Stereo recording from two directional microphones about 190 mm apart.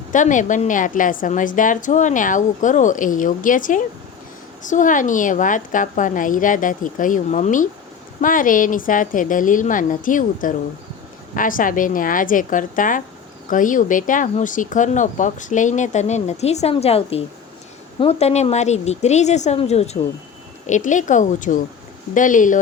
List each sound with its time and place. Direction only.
0.1 s a woman's voice: 40° left (ahead or behind)